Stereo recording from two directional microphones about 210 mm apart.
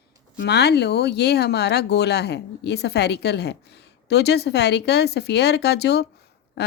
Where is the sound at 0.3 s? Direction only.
50° left (ahead or behind).